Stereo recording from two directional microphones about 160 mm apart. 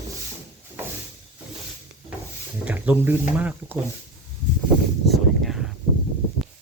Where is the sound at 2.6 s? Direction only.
10° right (ahead or behind).